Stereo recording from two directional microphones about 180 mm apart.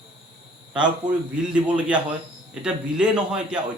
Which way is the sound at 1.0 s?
45° right (ahead or behind).